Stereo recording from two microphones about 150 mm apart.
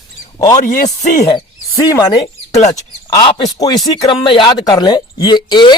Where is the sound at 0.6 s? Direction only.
55° left (ahead or behind).